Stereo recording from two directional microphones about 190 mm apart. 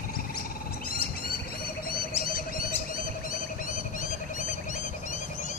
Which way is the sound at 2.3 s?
50° left (ahead or behind).